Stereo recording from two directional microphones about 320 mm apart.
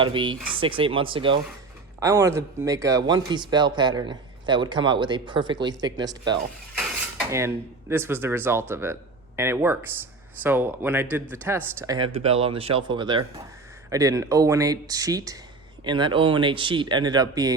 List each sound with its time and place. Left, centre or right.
0.0 s speech: centre